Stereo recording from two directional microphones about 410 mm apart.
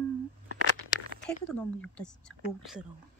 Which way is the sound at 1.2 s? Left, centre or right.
Centre.